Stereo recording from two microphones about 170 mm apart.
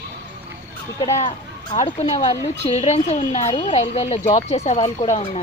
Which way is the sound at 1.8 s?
40° left (ahead or behind).